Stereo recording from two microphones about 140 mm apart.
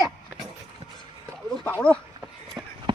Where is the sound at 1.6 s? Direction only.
10° left (ahead or behind).